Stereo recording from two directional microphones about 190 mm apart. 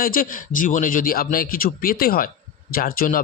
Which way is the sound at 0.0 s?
45° left (ahead or behind).